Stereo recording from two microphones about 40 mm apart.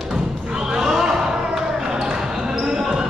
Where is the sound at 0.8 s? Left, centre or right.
Centre.